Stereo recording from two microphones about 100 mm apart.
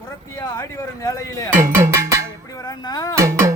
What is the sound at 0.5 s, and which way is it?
Speech, 30° left (ahead or behind).